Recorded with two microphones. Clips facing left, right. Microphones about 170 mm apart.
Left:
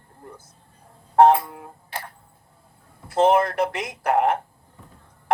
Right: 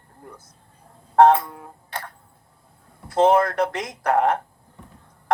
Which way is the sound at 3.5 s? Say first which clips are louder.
Right 1 dB; 5° left (ahead or behind).